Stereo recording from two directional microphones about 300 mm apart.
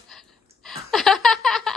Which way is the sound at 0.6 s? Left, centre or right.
Centre.